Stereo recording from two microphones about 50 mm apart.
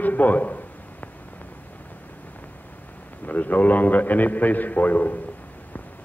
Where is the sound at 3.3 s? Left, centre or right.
Left.